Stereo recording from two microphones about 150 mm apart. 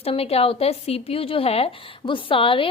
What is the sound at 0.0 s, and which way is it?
Speech, 40° left (ahead or behind).